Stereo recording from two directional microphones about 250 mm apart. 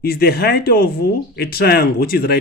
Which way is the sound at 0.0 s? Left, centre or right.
Left.